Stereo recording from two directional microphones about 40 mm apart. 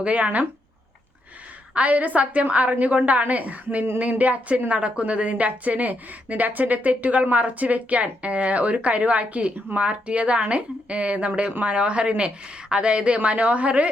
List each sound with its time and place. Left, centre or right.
0.0 s a woman's voice: right
1.7 s a woman's voice: right